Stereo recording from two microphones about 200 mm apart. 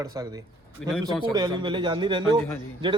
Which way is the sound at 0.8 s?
5° left (ahead or behind).